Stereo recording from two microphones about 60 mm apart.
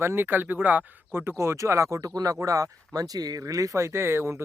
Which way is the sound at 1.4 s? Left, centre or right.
Right.